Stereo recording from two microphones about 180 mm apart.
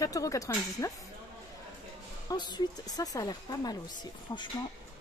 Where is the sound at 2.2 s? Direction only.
25° left (ahead or behind).